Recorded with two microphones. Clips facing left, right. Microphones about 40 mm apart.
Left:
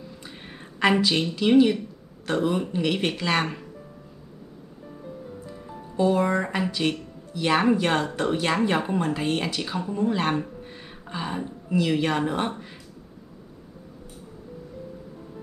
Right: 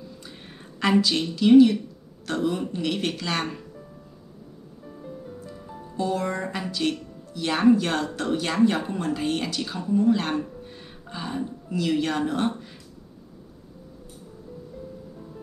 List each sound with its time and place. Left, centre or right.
0.7 s a woman's voice: left
4.8 s music: centre
5.9 s a woman's voice: centre